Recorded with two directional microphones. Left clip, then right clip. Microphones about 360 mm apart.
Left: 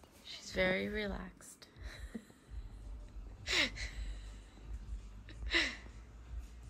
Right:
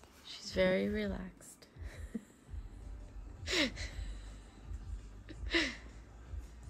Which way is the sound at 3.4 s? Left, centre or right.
Centre.